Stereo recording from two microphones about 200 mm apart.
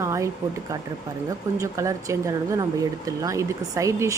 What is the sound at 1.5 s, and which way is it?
Speech, 15° right (ahead or behind).